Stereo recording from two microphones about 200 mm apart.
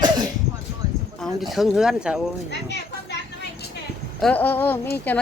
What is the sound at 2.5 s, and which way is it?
Children playing, 60° left (ahead or behind).